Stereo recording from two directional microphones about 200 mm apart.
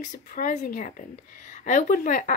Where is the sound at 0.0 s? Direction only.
40° left (ahead or behind).